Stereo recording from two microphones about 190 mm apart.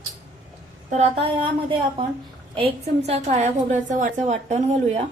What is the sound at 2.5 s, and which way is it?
A woman's voice, 30° right (ahead or behind).